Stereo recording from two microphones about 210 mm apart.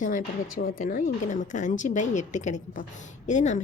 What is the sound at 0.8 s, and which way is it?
A woman's voice, 40° left (ahead or behind).